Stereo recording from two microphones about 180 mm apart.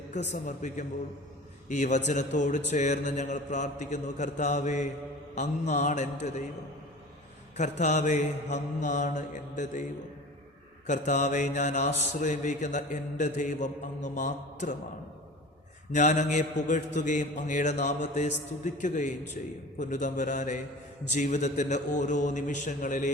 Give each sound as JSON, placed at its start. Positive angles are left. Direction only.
{"t": 0.1, "sound": "mantra", "side_deg": 40}
{"t": 1.7, "sound": "a man's voice", "side_deg": 40}
{"t": 7.5, "sound": "mantra", "side_deg": 40}
{"t": 10.8, "sound": "mantra", "side_deg": 40}
{"t": 15.9, "sound": "mantra", "side_deg": 40}